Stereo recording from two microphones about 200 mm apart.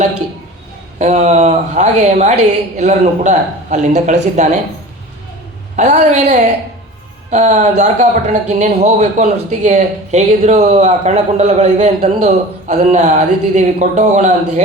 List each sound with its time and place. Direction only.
0.9 s speech: 35° right (ahead or behind)
5.7 s speech: 35° right (ahead or behind)